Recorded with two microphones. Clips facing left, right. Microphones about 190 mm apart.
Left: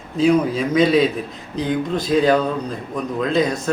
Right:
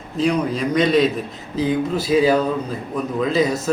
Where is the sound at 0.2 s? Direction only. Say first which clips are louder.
Left 3 dB; centre (ahead or behind).